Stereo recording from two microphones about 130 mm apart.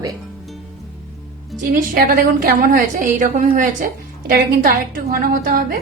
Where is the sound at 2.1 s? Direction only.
90° right.